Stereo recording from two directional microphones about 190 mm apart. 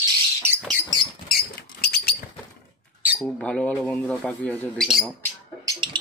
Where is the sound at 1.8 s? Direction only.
55° left (ahead or behind).